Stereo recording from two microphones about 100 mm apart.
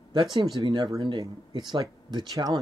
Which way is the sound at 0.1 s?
50° right (ahead or behind).